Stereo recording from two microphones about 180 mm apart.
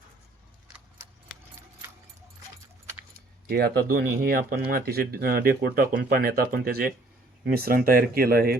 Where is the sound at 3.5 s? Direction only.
60° right (ahead or behind).